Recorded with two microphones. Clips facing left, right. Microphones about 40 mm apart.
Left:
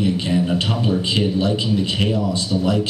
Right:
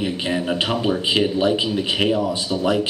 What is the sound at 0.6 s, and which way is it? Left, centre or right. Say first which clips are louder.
A man's voice: even; centre.